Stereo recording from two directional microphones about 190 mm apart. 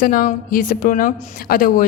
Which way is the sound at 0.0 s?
50° left (ahead or behind).